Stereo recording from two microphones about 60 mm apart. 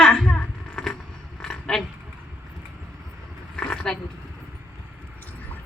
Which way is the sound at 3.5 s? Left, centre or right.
Centre.